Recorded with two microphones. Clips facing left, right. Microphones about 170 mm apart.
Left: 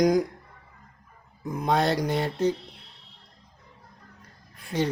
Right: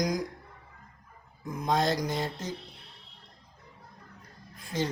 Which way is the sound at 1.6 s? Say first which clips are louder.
Left 3 dB; 65° left (ahead or behind).